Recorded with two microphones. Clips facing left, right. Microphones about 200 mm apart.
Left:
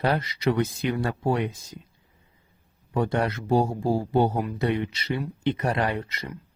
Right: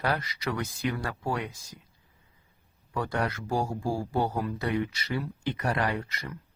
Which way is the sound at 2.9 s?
25° left (ahead or behind).